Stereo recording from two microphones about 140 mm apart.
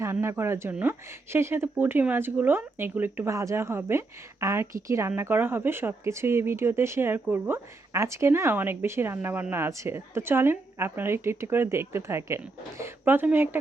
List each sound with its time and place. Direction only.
0.0 s speech: 20° right (ahead or behind)